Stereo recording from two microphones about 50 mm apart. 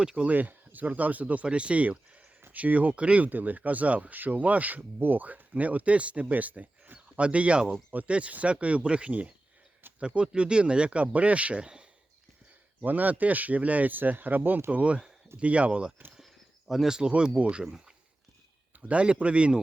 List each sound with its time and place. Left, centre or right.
0.0 s speech: centre
0.3 s speech: right
9.8 s a sound: right
10.2 s speech: right
12.8 s speech: right
14.7 s speech: right
16.2 s a sound: centre
17.1 s speech: right
17.7 s speech: centre
18.8 s speech: right